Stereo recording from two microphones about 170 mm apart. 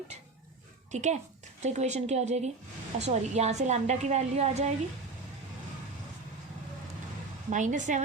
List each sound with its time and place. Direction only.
0.9 s a child's voice: 45° right (ahead or behind)
7.5 s speech: 45° right (ahead or behind)